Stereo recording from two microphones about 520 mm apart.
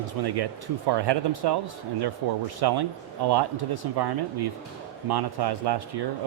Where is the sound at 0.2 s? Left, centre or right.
Right.